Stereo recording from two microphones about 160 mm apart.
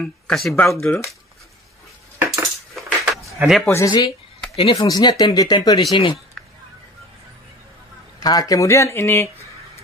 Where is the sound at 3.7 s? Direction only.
20° left (ahead or behind).